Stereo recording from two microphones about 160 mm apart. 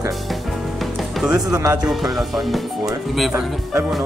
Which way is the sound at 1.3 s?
20° right (ahead or behind).